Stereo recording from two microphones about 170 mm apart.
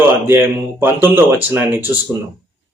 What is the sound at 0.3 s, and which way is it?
Speech, 10° right (ahead or behind).